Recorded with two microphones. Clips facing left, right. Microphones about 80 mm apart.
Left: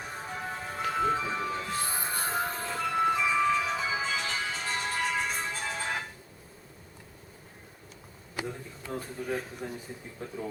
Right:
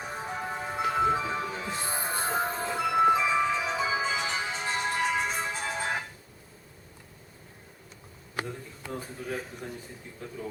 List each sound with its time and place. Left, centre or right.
0.0 s music: centre
9.0 s a man's voice: centre
10.2 s speech: left